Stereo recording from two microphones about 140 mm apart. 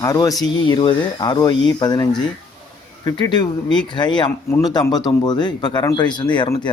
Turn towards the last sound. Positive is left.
turn(degrees=35)  # may be behind; listen again after turning